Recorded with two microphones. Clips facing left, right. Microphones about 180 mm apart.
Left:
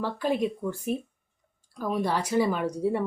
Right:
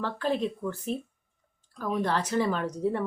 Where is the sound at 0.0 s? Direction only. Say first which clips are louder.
Left 2 dB; 10° left (ahead or behind).